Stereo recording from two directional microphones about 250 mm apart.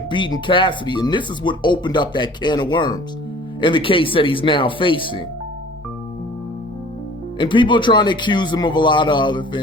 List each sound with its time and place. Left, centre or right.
0.1 s speech: centre
7.3 s speech: centre